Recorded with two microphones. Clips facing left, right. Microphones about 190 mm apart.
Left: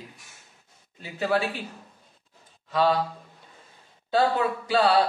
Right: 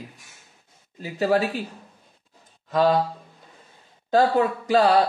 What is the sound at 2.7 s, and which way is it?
Speech, 45° right (ahead or behind).